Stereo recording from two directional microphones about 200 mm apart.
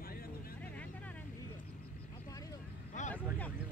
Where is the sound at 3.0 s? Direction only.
40° left (ahead or behind).